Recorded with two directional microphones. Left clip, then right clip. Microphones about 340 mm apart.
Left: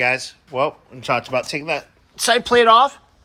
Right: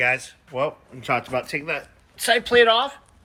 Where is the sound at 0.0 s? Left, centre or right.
Centre.